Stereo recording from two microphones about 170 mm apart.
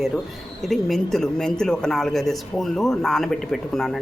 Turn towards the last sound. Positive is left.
turn(degrees=0)  # may be behind; listen again after turning